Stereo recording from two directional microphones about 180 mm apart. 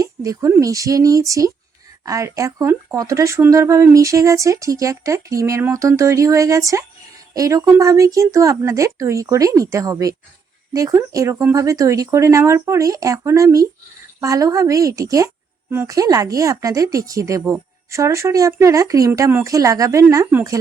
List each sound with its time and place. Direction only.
0.0 s speech: 20° right (ahead or behind)